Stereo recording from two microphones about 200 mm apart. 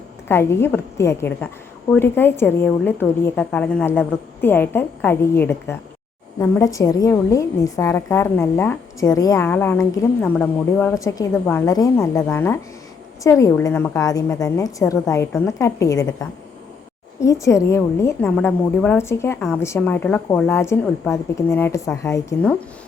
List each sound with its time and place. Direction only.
0.3 s a woman's voice: 10° left (ahead or behind)